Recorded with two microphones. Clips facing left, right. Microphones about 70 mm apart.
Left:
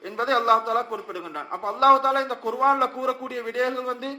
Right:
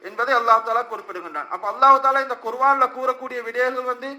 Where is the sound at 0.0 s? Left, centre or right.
Right.